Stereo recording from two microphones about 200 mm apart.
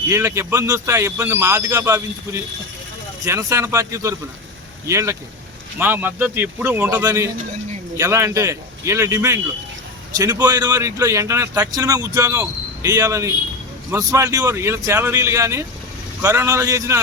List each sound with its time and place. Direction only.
0.1 s speech: 15° right (ahead or behind)